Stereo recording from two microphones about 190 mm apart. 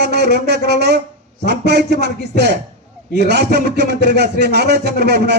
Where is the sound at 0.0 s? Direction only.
60° right (ahead or behind).